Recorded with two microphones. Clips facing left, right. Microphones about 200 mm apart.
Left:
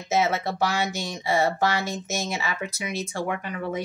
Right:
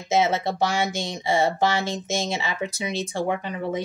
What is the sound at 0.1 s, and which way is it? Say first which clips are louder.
Speech: right 2 dB; 25° right (ahead or behind).